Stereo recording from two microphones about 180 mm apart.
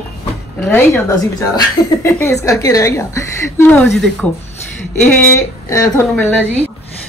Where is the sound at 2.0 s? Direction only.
15° left (ahead or behind).